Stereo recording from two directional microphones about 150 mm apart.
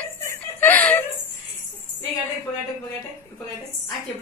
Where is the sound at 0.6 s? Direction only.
10° left (ahead or behind).